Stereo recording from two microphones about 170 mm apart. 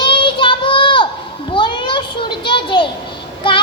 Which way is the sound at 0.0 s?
30° left (ahead or behind).